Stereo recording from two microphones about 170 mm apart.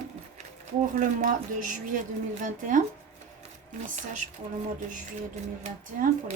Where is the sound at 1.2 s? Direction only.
50° right (ahead or behind).